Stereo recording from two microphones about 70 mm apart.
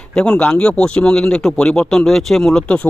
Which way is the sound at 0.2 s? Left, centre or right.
Centre.